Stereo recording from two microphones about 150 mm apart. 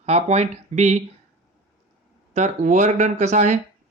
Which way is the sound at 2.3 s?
50° right (ahead or behind).